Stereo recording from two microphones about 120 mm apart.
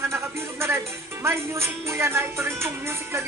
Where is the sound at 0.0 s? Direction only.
20° right (ahead or behind).